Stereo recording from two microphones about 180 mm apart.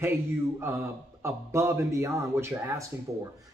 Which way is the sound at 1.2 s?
15° right (ahead or behind).